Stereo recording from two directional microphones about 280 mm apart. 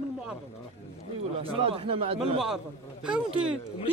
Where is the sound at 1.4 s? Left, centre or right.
Centre.